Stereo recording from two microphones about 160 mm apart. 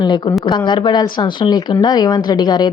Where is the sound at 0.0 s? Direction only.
25° left (ahead or behind).